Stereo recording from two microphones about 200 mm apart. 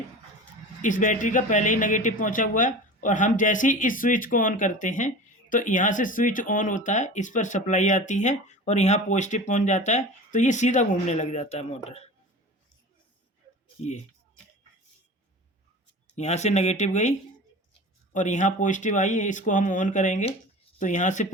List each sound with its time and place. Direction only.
0.8 s speech: 40° left (ahead or behind)
16.1 s speech: 35° left (ahead or behind)